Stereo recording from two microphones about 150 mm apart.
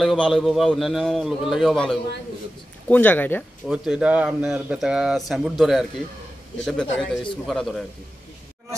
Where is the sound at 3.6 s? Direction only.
5° right (ahead or behind).